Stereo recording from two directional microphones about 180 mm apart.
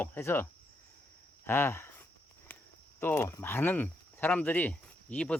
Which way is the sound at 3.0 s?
15° left (ahead or behind).